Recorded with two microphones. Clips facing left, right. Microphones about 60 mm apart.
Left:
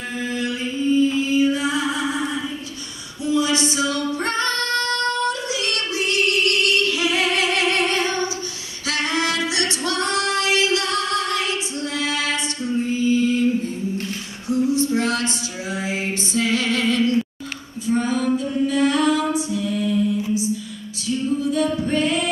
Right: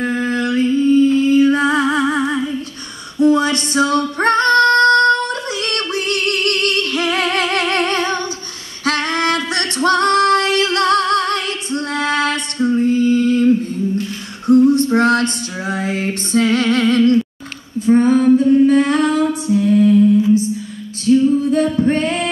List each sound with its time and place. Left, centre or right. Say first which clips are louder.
0.0 s music: right 7 dB; right
3.2 s female singing: right 7 dB; right
14.5 s a sound: right 8 dB; right
16.3 s music: right 7 dB; right
21.0 s singing: right 10 dB; right